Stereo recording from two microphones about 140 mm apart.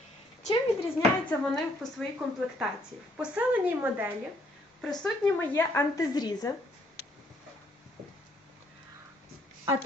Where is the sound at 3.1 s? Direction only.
10° right (ahead or behind).